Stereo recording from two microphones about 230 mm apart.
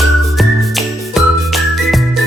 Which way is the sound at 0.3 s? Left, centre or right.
Centre.